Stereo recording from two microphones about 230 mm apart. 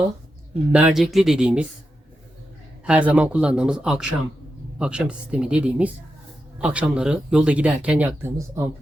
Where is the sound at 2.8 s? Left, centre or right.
Centre.